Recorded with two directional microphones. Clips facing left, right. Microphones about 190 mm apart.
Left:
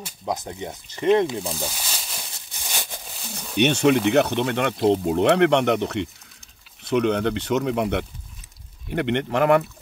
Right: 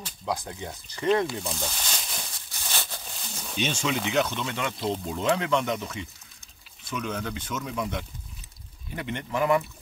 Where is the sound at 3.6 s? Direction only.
65° left (ahead or behind).